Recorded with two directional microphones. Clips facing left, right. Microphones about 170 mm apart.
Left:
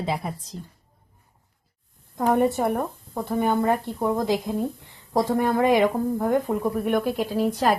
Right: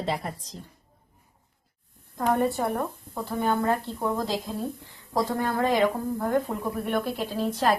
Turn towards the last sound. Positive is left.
turn(degrees=10)  # may be behind; listen again after turning